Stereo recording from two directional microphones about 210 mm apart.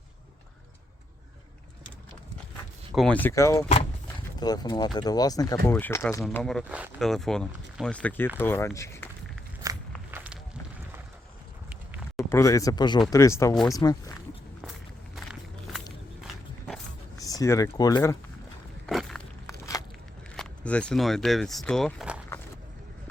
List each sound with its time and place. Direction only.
2.9 s speech: 5° left (ahead or behind)
6.2 s speech: 5° left (ahead or behind)
9.6 s walk: 15° right (ahead or behind)
10.1 s a sound: 10° right (ahead or behind)
12.3 s speech: 15° left (ahead or behind)
14.6 s walk: centre (ahead or behind)
17.2 s speech: 15° left (ahead or behind)
18.9 s walk: centre (ahead or behind)
19.5 s a sound: 15° left (ahead or behind)
20.3 s speech: 5° left (ahead or behind)